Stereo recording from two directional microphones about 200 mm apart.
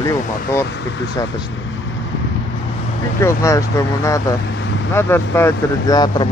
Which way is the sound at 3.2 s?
15° left (ahead or behind).